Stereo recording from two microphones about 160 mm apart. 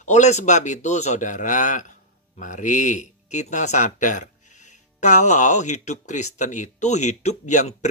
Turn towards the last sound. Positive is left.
turn(degrees=50)  # may be behind; listen again after turning